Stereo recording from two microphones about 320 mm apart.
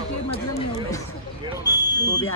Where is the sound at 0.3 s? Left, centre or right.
Centre.